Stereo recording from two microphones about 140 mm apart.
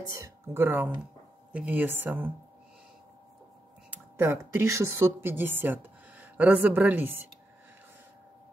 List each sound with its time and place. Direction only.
0.1 s speech: 20° right (ahead or behind)
3.9 s speech: 15° right (ahead or behind)